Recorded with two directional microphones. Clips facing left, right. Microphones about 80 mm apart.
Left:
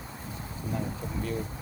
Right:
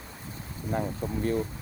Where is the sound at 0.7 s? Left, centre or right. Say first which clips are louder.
Right 4 dB; right.